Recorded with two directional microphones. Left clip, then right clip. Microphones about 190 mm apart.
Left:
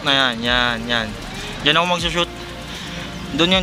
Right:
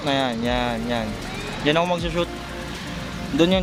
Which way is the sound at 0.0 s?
5° right (ahead or behind).